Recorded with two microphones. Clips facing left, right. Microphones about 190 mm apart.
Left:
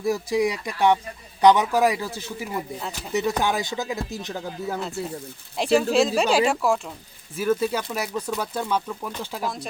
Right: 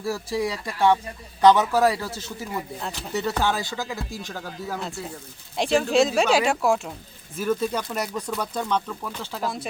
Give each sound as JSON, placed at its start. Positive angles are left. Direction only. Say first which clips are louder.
{"t": 0.0, "sound": "speech", "louder": "left 4 dB", "side_deg": 15}
{"t": 4.8, "sound": "speech", "louder": "left 4 dB", "side_deg": 0}